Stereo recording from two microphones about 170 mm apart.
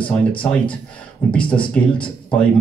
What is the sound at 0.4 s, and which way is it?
Speech, 10° left (ahead or behind).